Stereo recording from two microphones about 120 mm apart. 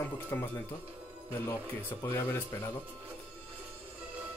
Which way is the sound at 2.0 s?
20° left (ahead or behind).